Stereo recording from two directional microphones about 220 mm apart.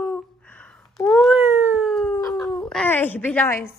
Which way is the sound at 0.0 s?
5° left (ahead or behind).